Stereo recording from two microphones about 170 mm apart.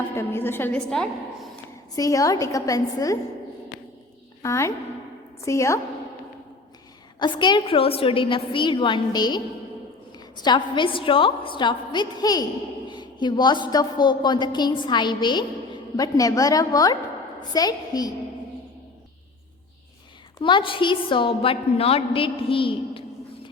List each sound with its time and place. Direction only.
0.2 s a woman's voice: 15° left (ahead or behind)
2.0 s a woman's voice: 20° left (ahead or behind)
4.4 s a woman's voice: 15° left (ahead or behind)
7.2 s a woman's voice: 25° left (ahead or behind)
20.4 s a woman's voice: 30° left (ahead or behind)